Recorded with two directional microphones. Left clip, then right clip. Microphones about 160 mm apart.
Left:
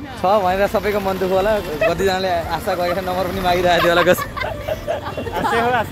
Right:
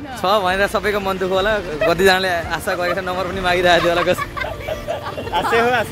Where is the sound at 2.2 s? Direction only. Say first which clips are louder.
Even; 5° right (ahead or behind).